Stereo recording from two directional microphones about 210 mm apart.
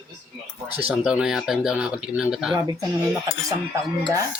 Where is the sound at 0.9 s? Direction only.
5° right (ahead or behind).